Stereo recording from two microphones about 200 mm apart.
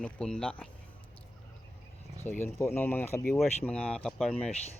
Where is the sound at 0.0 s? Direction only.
5° left (ahead or behind).